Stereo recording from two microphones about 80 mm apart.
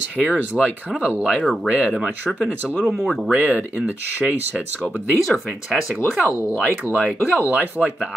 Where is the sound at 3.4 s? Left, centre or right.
Centre.